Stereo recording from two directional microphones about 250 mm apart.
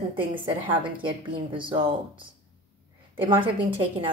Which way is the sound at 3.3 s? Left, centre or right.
Centre.